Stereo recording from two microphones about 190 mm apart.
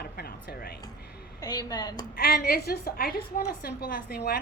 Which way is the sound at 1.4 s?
20° left (ahead or behind).